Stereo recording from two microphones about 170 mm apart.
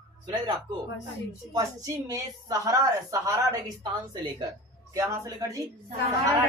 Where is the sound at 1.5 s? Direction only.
20° right (ahead or behind).